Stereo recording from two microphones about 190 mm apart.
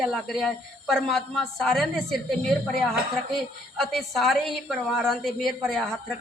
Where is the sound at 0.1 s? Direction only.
Centre (ahead or behind).